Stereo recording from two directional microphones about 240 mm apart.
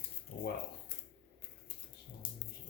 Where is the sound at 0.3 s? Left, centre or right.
Left.